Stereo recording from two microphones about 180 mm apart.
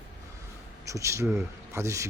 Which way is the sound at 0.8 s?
15° right (ahead or behind).